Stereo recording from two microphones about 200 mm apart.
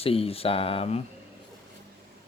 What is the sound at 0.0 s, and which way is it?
Speech, 30° left (ahead or behind).